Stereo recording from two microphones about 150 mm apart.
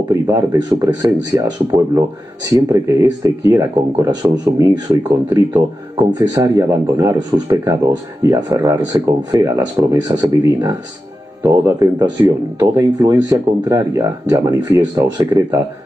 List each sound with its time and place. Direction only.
0.1 s speech: 25° right (ahead or behind)